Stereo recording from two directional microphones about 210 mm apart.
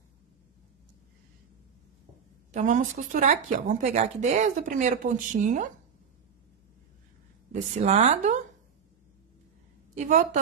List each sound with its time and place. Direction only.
2.5 s speech: 35° right (ahead or behind)
7.7 s speech: 30° right (ahead or behind)
9.9 s speech: 35° right (ahead or behind)